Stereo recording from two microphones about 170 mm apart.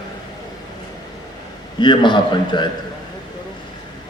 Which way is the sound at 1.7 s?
25° left (ahead or behind).